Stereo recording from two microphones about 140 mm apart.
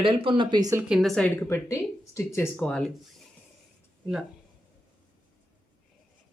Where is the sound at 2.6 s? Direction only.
5° left (ahead or behind).